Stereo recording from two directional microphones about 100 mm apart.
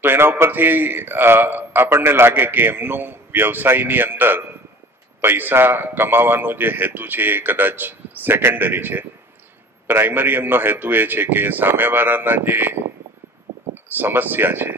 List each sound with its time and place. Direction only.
0.0 s a man's voice: 20° right (ahead or behind)
13.8 s a man's voice: 20° right (ahead or behind)